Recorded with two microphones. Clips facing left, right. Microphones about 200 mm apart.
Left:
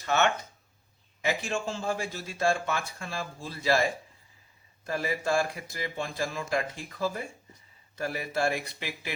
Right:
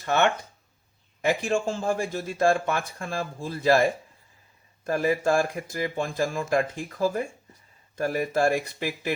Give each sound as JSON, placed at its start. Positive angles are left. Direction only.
{"t": 0.0, "sound": "a man's voice", "side_deg": -55}
{"t": 4.9, "sound": "a man's voice", "side_deg": -50}